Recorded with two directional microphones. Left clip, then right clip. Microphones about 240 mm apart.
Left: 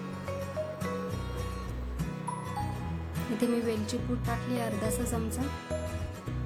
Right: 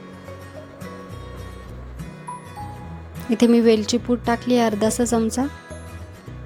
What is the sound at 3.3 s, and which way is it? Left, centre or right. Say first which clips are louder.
A woman's voice: right 15 dB; right.